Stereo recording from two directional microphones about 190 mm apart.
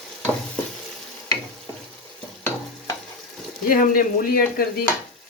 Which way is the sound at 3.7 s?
45° left (ahead or behind).